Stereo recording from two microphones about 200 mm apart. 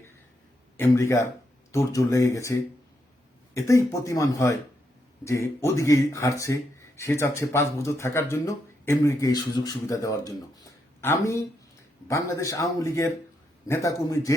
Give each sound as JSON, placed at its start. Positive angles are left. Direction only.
{"t": 0.8, "sound": "speech", "side_deg": 15}